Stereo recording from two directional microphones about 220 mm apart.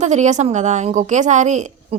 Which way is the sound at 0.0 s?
30° right (ahead or behind).